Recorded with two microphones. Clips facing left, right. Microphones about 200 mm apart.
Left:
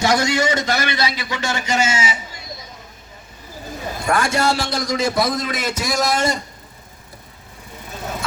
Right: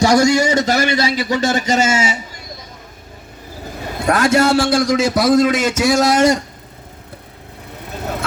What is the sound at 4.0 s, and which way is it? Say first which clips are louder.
Speech: right 6 dB; 55° right (ahead or behind).